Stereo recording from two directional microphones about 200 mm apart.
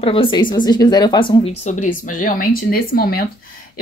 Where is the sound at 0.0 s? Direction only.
25° left (ahead or behind).